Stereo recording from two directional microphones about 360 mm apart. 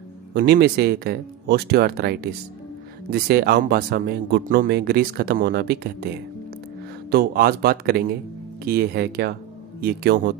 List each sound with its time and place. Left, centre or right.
0.3 s speech: right
7.1 s speech: right